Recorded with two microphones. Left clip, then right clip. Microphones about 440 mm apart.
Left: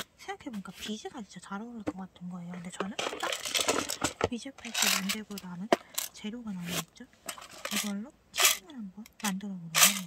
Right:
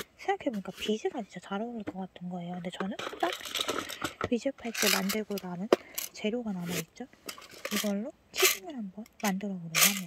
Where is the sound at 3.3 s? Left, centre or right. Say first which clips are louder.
Left 3 dB; left.